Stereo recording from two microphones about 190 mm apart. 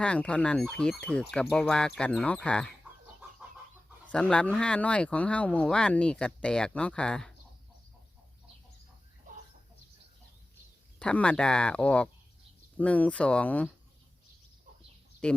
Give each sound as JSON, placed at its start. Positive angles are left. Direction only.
{"t": 0.0, "sound": "speech", "side_deg": 5}
{"t": 4.0, "sound": "speech", "side_deg": 5}
{"t": 9.3, "sound": "chicken", "side_deg": -40}
{"t": 11.0, "sound": "speech", "side_deg": 5}
{"t": 15.2, "sound": "speech", "side_deg": 5}